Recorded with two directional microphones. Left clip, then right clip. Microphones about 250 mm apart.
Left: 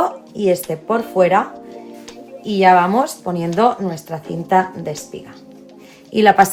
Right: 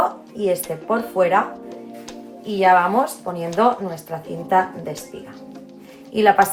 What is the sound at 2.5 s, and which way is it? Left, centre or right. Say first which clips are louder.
Speech: left 3 dB; left.